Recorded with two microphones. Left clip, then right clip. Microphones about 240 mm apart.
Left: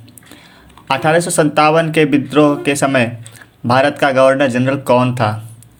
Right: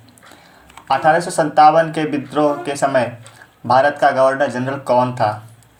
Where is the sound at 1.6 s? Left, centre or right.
Left.